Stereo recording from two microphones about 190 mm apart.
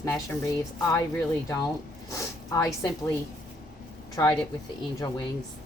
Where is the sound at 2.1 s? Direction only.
15° left (ahead or behind).